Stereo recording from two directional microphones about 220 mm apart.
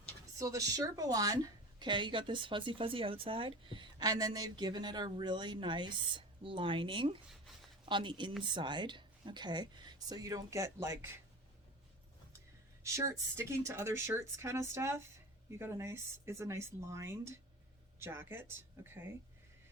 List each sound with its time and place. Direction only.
0.3 s speech: 15° right (ahead or behind)
12.8 s speech: 15° right (ahead or behind)